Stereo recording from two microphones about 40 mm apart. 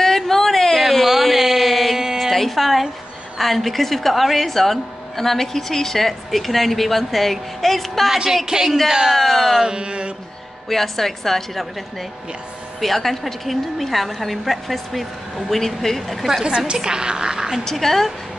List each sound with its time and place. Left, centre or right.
0.0 s a sound: centre
2.3 s a sound: centre
3.3 s a woman's voice: centre
8.5 s speech: centre
9.1 s a woman's voice: centre
9.6 s mantra: right
10.7 s a woman's voice: centre
16.4 s mantra: right
16.7 s speech: centre
17.6 s a woman's voice: centre